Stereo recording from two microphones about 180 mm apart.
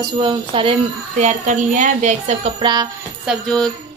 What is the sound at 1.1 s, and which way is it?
A woman's voice, 40° right (ahead or behind).